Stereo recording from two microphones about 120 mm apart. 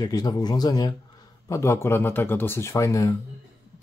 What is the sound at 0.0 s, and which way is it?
Speech, 35° left (ahead or behind).